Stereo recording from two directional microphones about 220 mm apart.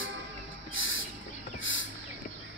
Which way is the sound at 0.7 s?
60° left (ahead or behind).